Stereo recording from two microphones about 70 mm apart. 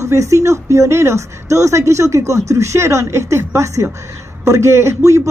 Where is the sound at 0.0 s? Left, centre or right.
Right.